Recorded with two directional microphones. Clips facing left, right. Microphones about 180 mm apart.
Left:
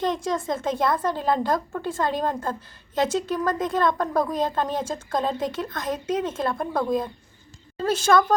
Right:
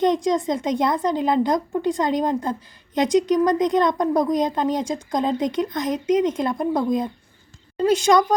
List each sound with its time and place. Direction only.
0.0 s speech: 20° right (ahead or behind)